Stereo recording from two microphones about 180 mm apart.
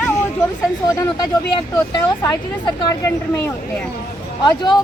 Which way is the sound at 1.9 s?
25° left (ahead or behind).